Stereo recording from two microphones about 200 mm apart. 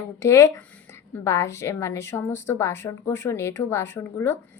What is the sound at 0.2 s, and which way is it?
A woman's voice, 15° left (ahead or behind).